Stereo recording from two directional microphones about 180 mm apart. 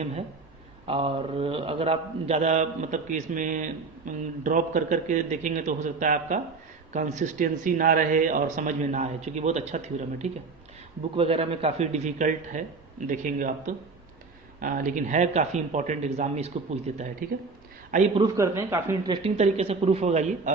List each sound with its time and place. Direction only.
0.9 s a man's voice: 30° right (ahead or behind)
18.1 s speech: 20° right (ahead or behind)
19.1 s speech: 35° right (ahead or behind)